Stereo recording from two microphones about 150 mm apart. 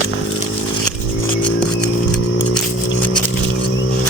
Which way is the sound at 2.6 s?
5° left (ahead or behind).